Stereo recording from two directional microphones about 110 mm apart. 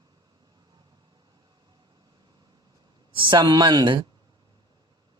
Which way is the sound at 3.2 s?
45° right (ahead or behind).